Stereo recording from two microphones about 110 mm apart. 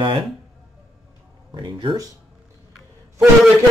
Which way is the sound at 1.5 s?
40° right (ahead or behind).